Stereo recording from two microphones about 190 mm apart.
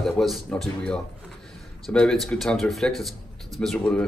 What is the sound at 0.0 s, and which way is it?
Speech, centre (ahead or behind).